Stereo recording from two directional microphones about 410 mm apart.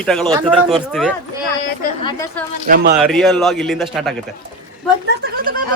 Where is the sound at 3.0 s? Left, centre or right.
Centre.